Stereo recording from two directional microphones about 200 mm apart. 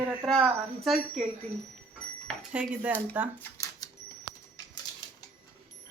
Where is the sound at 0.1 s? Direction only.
5° right (ahead or behind).